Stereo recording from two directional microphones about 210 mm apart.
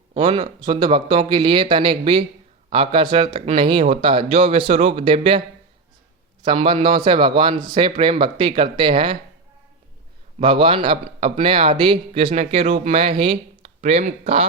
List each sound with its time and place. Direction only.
0.1 s speech: 25° right (ahead or behind)
6.4 s speech: 25° right (ahead or behind)
10.4 s speech: 25° right (ahead or behind)